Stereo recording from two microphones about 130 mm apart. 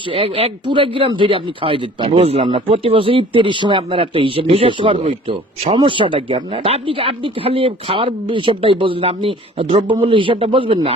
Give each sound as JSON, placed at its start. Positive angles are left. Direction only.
{"t": 0.1, "sound": "a man's voice", "side_deg": -45}